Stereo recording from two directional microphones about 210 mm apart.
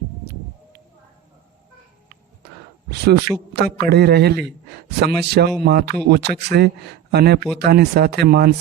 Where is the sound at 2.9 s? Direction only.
50° right (ahead or behind).